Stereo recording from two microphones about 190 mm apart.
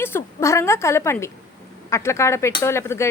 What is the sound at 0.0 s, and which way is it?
Speech, 10° left (ahead or behind).